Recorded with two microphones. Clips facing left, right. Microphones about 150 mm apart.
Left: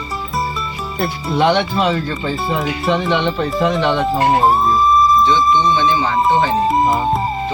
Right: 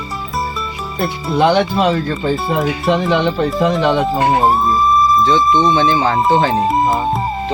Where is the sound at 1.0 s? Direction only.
Centre (ahead or behind).